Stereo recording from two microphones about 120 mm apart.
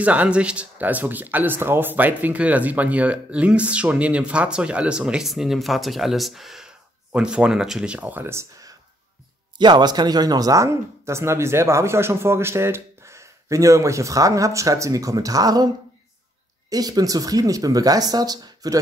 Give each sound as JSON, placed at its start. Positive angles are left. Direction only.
{"t": 0.0, "sound": "speech", "side_deg": -10}
{"t": 9.6, "sound": "speech", "side_deg": -40}
{"t": 16.7, "sound": "speech", "side_deg": -30}